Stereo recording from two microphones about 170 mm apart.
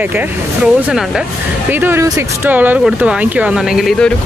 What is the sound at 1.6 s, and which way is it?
Speech, 10° right (ahead or behind).